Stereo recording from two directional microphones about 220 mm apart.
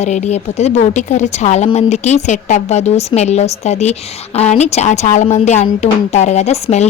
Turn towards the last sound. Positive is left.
turn(degrees=30)  # may be behind; listen again after turning